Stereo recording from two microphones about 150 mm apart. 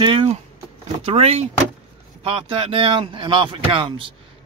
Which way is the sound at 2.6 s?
40° right (ahead or behind).